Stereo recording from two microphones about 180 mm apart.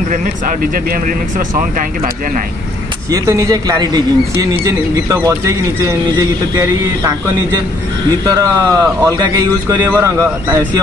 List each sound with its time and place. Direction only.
1.0 s speech: 50° right (ahead or behind)
3.1 s a man's voice: 20° right (ahead or behind)